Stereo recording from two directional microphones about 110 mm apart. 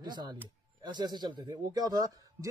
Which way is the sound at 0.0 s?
40° right (ahead or behind).